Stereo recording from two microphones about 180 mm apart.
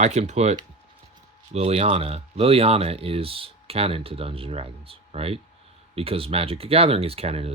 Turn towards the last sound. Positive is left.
turn(degrees=-35)  # may be behind; listen again after turning